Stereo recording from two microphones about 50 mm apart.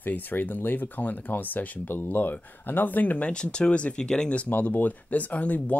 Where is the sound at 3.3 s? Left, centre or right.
Centre.